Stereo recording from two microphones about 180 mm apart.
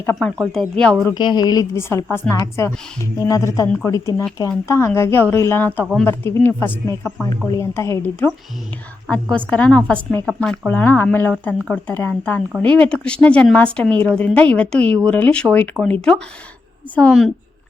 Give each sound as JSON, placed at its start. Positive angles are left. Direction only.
{"t": 0.2, "sound": "a woman's voice", "side_deg": 0}
{"t": 1.1, "sound": "a woman's voice", "side_deg": 25}
{"t": 6.1, "sound": "a woman's voice", "side_deg": 15}